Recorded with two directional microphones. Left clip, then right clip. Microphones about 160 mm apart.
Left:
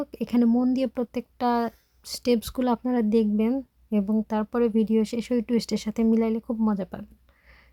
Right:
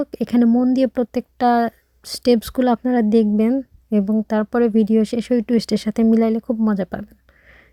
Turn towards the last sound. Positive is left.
turn(degrees=-30)  # may be behind; listen again after turning